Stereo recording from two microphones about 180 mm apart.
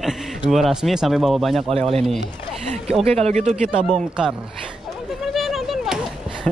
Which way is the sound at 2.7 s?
35° right (ahead or behind).